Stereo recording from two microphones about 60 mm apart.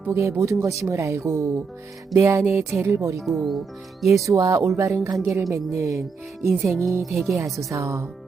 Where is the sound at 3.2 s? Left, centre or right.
Centre.